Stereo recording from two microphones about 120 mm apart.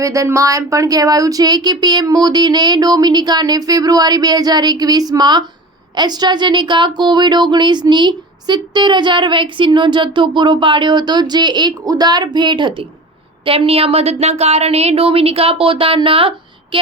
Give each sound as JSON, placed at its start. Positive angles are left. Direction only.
{"t": 0.0, "sound": "speech", "side_deg": -25}
{"t": 13.4, "sound": "speech", "side_deg": -55}
{"t": 16.7, "sound": "a sound", "side_deg": -45}